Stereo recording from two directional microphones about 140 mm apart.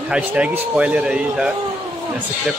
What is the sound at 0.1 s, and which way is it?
A man's voice, 10° right (ahead or behind).